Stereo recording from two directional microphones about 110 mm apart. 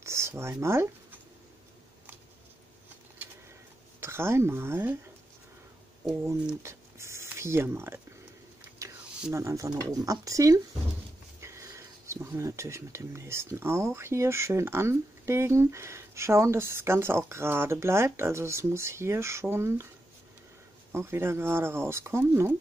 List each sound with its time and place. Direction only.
0.0 s speech: 25° right (ahead or behind)
4.0 s speech: 25° right (ahead or behind)
6.6 s a sound: 25° right (ahead or behind)
9.3 s speech: 25° right (ahead or behind)
20.9 s speech: 25° right (ahead or behind)